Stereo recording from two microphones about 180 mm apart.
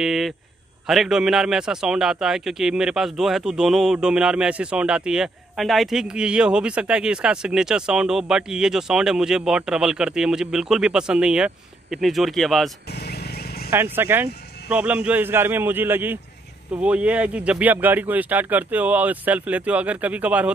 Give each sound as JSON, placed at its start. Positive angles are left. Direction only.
{"t": 0.0, "sound": "a man's voice", "side_deg": 0}
{"t": 12.9, "sound": "wild animals", "side_deg": 60}
{"t": 13.7, "sound": "speech", "side_deg": -10}